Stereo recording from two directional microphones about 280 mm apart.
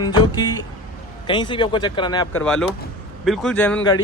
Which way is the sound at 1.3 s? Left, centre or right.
Centre.